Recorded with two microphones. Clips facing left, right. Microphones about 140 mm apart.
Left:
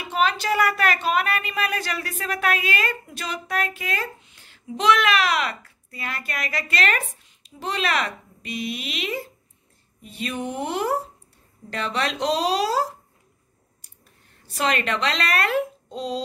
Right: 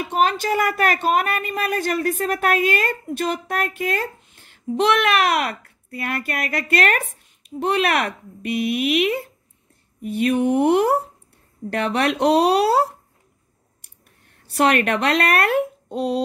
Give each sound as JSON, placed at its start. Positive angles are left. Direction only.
{"t": 0.0, "sound": "a woman's voice", "side_deg": -50}
{"t": 14.5, "sound": "a woman's voice", "side_deg": -60}